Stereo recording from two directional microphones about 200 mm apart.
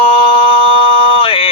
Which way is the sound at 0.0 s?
25° left (ahead or behind).